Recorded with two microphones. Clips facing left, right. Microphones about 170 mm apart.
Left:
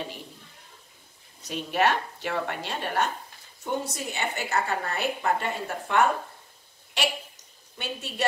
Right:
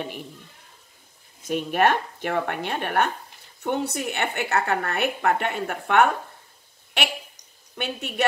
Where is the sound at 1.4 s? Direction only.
50° right (ahead or behind).